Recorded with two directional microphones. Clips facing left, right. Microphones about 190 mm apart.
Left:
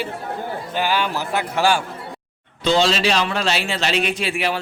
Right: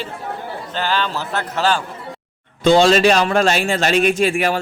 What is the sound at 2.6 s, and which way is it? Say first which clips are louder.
A man's voice: right 6 dB; 50° right (ahead or behind).